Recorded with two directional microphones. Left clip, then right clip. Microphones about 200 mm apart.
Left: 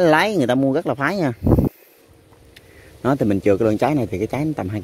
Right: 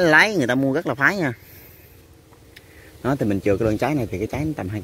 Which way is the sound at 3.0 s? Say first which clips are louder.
Left 4 dB; 25° left (ahead or behind).